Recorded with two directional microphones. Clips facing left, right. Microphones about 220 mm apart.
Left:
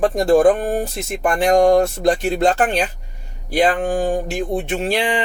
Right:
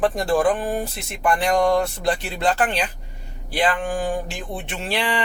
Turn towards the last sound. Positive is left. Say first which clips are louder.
# left 8 dB
turn(degrees=40)  # may be behind; listen again after turning